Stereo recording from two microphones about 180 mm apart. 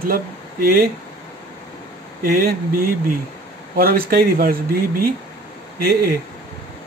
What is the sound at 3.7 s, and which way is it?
Speech, 55° right (ahead or behind).